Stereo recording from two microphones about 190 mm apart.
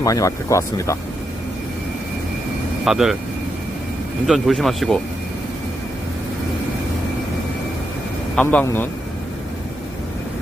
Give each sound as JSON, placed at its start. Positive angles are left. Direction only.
{"t": 0.0, "sound": "speech", "side_deg": 15}
{"t": 2.8, "sound": "speech", "side_deg": 0}
{"t": 4.3, "sound": "speech", "side_deg": 0}
{"t": 8.4, "sound": "speech", "side_deg": 10}